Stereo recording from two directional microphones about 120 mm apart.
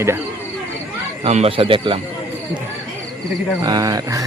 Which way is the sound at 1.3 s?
55° right (ahead or behind).